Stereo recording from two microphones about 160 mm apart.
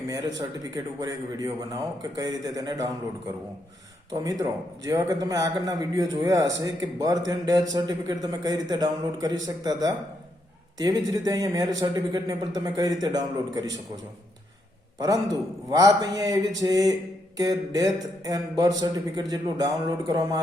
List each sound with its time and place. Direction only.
0.1 s a man's voice: 25° right (ahead or behind)
4.1 s a man's voice: 25° right (ahead or behind)
14.9 s a man's voice: 25° right (ahead or behind)